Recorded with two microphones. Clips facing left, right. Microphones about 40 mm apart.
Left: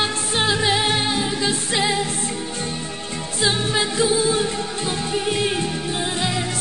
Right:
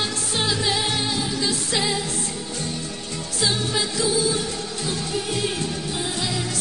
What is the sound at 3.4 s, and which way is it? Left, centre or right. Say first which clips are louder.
Music: left 3 dB; left.